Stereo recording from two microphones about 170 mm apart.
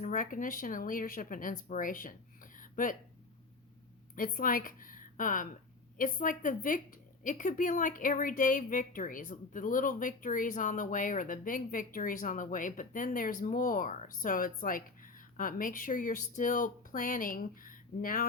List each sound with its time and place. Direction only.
0.0 s a woman's voice: 50° left (ahead or behind)
2.6 s a sound: 55° left (ahead or behind)
4.1 s a woman's voice: 55° left (ahead or behind)